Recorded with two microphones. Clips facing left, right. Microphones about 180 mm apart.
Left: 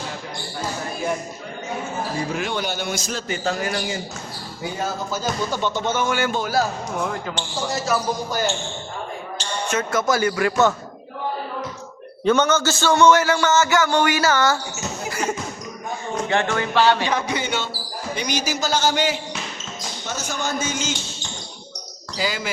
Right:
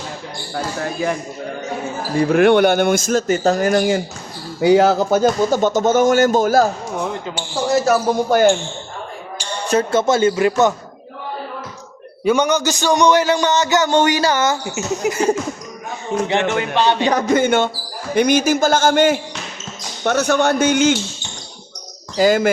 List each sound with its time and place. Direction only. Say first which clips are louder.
2.1 s speech: right 16 dB; 60° right (ahead or behind)
4.6 s speech: right 15 dB; 85° right; by 6.7 s 45° right (ahead or behind)
7.9 s a man's voice: right 8 dB; 60° right (ahead or behind)
9.6 s speech: right 6 dB; 30° right (ahead or behind)
12.2 s a man's voice: right 2 dB; 10° right (ahead or behind)
15.1 s speech: right 7 dB; 30° right (ahead or behind)
16.2 s speech: right 3 dB; 20° right (ahead or behind)
17.1 s speech: right 9 dB; 45° right (ahead or behind)
20.1 s a man's voice: right 12 dB; 65° right (ahead or behind)
22.2 s speech: right 12 dB; 50° right (ahead or behind)